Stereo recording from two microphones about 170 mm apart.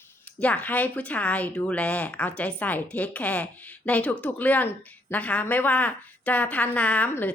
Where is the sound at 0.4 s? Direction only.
10° left (ahead or behind).